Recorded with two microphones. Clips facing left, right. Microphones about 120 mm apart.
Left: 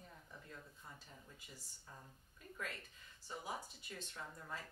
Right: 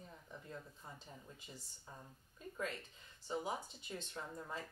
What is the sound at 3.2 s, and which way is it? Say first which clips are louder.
Speech: right 5 dB; 25° right (ahead or behind).